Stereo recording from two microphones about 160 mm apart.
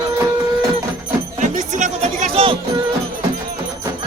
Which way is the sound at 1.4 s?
50° right (ahead or behind).